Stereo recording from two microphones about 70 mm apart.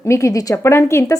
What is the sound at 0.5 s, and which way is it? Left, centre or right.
Speech, left.